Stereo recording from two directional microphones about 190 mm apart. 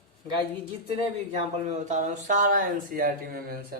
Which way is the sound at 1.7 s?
40° right (ahead or behind).